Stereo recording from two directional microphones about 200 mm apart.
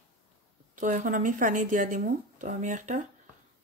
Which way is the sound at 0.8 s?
40° right (ahead or behind).